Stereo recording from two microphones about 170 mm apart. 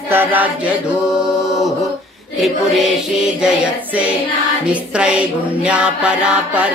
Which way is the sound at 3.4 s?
5° right (ahead or behind).